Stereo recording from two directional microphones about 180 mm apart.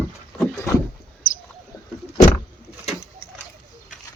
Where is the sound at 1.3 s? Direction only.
45° left (ahead or behind).